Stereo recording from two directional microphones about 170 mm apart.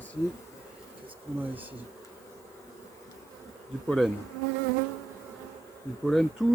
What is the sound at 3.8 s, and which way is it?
Speech, centre (ahead or behind).